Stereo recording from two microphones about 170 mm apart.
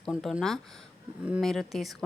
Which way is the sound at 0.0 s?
Centre (ahead or behind).